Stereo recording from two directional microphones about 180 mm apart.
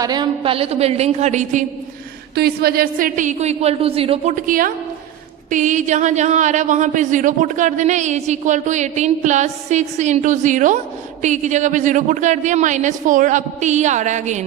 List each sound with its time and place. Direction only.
0.0 s speech: 25° right (ahead or behind); by 1.6 s 40° right (ahead or behind)
2.3 s a woman's voice: 60° right (ahead or behind); by 14.4 s 40° right (ahead or behind)